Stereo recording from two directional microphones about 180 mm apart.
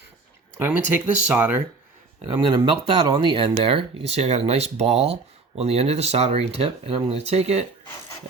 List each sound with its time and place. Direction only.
0.6 s speech: 10° right (ahead or behind)
2.2 s speech: 25° right (ahead or behind)